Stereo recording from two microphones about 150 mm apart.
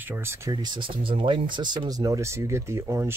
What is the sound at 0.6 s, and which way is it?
Speech, 30° right (ahead or behind).